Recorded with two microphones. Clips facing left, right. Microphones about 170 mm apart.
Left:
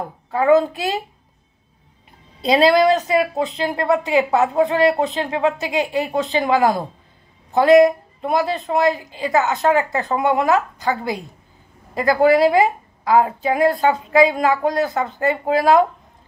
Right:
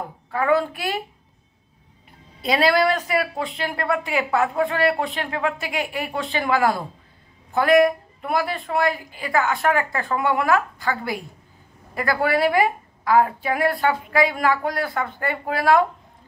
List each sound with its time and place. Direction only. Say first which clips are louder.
0.3 s a woman's voice: left 6 dB; 20° left (ahead or behind)
2.4 s a woman's voice: left 5 dB; 25° left (ahead or behind)